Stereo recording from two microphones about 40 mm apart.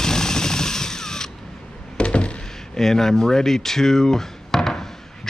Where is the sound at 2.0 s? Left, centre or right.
Left.